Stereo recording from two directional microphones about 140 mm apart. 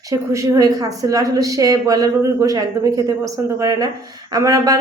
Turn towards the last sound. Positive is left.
turn(degrees=-25)  # may be behind; listen again after turning